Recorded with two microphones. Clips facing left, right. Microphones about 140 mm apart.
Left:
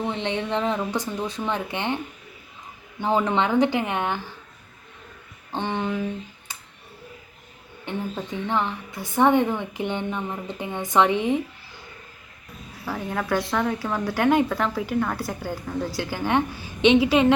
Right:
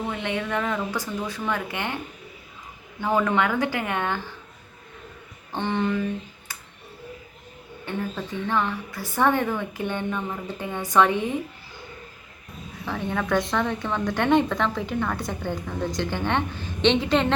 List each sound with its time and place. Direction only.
0.0 s speech: 25° left (ahead or behind)
3.0 s speech: 20° left (ahead or behind)
5.5 s a woman's voice: 15° left (ahead or behind)
6.5 s a sound: 20° left (ahead or behind)
7.9 s a woman's voice: 20° left (ahead or behind)
12.8 s a woman's voice: 5° left (ahead or behind)